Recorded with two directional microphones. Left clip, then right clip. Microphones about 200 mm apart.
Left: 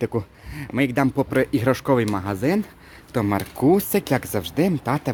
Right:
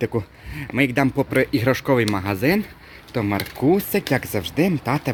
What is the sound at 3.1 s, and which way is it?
A man's voice, 15° left (ahead or behind).